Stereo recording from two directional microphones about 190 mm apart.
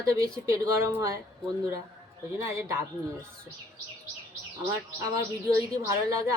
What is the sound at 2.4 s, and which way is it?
Speech, 15° right (ahead or behind).